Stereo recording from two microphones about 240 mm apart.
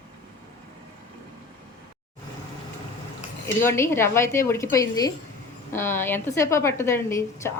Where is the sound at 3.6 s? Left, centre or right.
Centre.